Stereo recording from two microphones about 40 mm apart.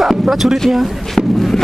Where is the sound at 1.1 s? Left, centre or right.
Centre.